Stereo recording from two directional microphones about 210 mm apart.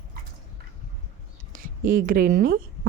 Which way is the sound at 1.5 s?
40° right (ahead or behind).